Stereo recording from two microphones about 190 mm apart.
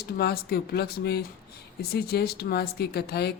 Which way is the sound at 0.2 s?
55° left (ahead or behind).